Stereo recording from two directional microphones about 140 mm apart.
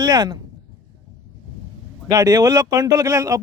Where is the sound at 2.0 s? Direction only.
25° right (ahead or behind).